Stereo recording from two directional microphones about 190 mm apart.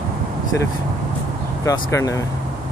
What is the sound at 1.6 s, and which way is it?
Speech, 20° left (ahead or behind).